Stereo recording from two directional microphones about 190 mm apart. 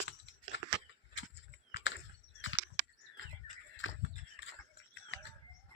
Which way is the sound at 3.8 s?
90° left.